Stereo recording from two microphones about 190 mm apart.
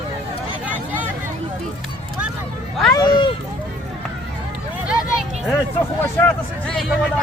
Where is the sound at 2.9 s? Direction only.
20° left (ahead or behind).